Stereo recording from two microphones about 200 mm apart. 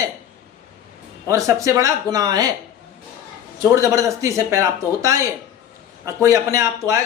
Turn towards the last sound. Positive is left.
turn(degrees=-15)  # may be behind; listen again after turning